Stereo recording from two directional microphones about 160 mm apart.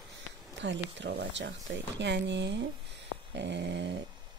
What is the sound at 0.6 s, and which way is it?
A woman's voice, 90° right.